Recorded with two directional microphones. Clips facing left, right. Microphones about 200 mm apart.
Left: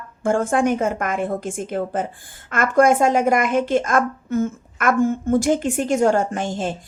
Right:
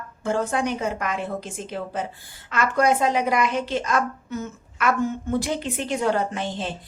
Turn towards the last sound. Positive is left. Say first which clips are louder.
# left 4 dB
turn(degrees=45)  # may be behind; listen again after turning